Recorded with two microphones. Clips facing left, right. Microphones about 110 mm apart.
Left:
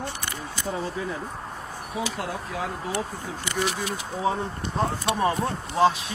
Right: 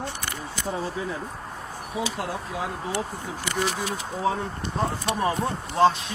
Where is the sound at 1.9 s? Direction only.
25° right (ahead or behind).